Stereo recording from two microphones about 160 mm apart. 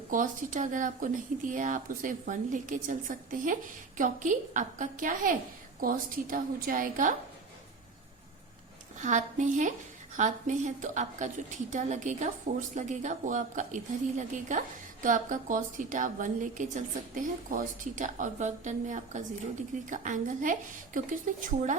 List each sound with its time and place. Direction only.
0.1 s speech: 55° right (ahead or behind)
9.0 s a woman's voice: 50° right (ahead or behind)